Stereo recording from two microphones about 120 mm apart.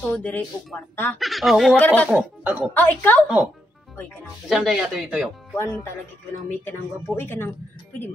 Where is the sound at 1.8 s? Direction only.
10° left (ahead or behind).